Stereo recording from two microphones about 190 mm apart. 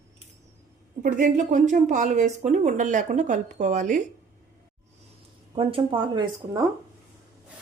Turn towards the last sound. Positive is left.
turn(degrees=-20)  # may be behind; listen again after turning